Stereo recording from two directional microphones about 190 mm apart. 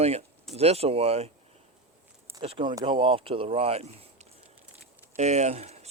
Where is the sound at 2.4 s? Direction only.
25° right (ahead or behind).